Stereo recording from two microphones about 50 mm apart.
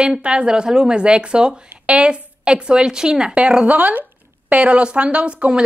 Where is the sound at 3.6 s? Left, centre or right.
Right.